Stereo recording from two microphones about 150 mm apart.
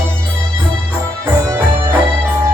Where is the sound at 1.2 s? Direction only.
15° right (ahead or behind).